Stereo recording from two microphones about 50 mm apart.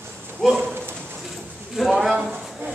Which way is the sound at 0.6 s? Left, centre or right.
Right.